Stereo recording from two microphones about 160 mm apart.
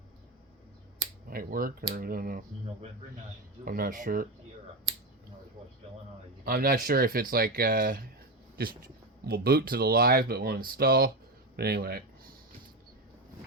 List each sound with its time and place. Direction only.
1.3 s speech: 65° right (ahead or behind)
3.6 s speech: 65° right (ahead or behind)
6.4 s speech: 65° right (ahead or behind)
11.5 s speech: 80° right